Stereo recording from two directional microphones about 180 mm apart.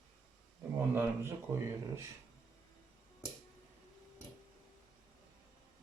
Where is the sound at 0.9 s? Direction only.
15° right (ahead or behind).